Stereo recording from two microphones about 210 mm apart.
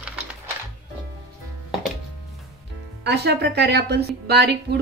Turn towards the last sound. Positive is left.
turn(degrees=-50)  # may be behind; listen again after turning